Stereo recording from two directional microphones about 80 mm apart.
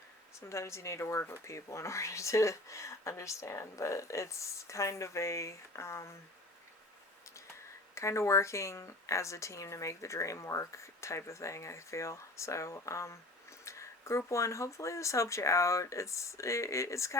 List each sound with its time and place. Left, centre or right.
0.3 s speech: left
7.9 s speech: left